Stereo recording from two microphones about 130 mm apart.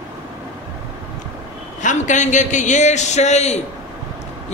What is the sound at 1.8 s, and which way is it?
Speech, 65° left (ahead or behind).